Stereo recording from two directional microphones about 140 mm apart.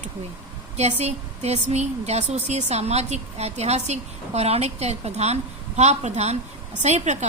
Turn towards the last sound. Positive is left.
turn(degrees=-55)  # may be behind; listen again after turning